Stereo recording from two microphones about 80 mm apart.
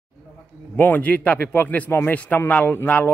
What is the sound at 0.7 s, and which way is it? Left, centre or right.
A man's voice, left.